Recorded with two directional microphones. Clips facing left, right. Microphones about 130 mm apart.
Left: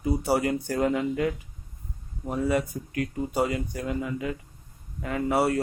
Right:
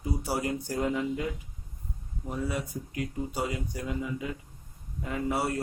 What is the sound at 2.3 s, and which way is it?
Speech, 60° left (ahead or behind).